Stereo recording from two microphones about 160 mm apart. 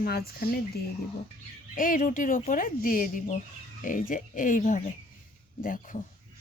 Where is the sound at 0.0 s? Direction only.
75° left (ahead or behind).